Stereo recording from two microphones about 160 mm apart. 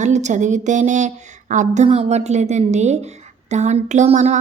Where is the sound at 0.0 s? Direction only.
45° right (ahead or behind).